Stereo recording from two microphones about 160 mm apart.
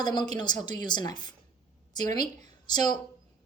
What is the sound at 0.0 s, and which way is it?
A woman's voice, 25° left (ahead or behind).